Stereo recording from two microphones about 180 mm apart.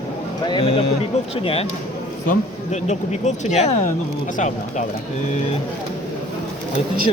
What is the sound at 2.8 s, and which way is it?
Speech, 40° left (ahead or behind).